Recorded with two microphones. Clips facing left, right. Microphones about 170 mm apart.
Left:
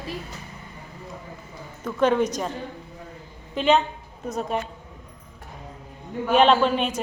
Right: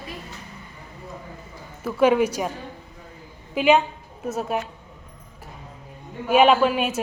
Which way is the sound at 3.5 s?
10° right (ahead or behind).